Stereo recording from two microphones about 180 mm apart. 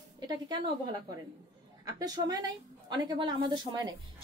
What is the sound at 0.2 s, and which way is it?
Speech, 25° right (ahead or behind).